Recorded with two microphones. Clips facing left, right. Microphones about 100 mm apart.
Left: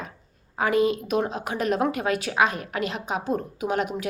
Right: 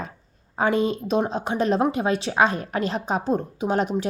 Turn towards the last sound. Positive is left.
turn(degrees=-30)  # may be behind; listen again after turning